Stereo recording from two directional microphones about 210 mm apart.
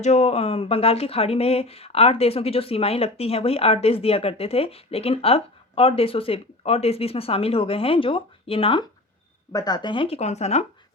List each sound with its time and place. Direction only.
0.0 s speech: 30° left (ahead or behind)